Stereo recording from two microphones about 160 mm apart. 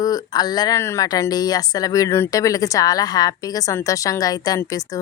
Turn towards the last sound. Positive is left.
turn(degrees=20)  # may be behind; listen again after turning